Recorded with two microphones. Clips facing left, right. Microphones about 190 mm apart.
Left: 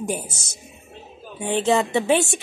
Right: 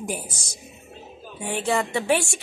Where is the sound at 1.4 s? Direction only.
20° left (ahead or behind).